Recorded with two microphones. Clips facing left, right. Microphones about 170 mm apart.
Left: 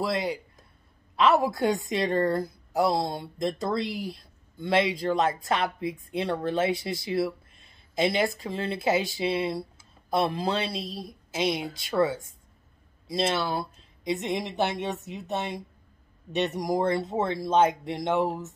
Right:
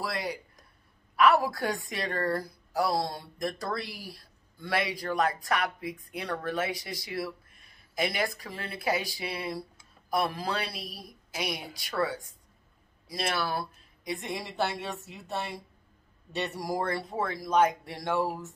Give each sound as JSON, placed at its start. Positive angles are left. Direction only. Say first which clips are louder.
{"t": 0.0, "sound": "a woman's voice", "louder": "left 6 dB", "side_deg": 20}